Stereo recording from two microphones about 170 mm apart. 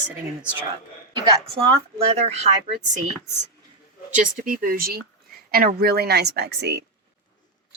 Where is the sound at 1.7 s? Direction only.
40° right (ahead or behind).